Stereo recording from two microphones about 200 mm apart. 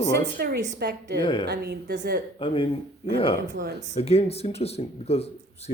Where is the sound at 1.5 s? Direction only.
55° right (ahead or behind).